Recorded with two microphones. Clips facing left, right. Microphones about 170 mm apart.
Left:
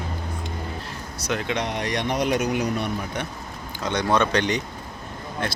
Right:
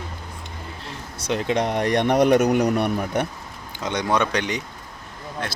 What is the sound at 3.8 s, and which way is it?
Speech, 15° right (ahead or behind).